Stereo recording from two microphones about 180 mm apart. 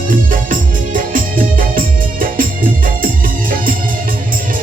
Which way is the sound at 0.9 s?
50° right (ahead or behind).